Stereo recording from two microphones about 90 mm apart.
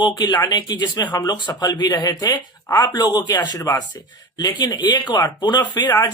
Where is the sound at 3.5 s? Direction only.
40° left (ahead or behind).